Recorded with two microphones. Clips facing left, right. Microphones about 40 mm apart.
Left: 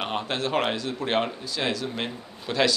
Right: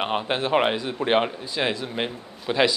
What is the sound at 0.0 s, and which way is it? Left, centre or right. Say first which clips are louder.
A man's voice: right 3 dB; centre.